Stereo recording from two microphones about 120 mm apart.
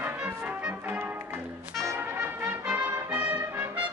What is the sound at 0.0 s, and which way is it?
Music, 15° right (ahead or behind).